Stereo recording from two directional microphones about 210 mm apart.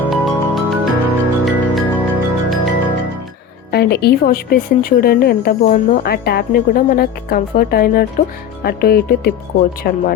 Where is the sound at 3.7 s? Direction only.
50° left (ahead or behind).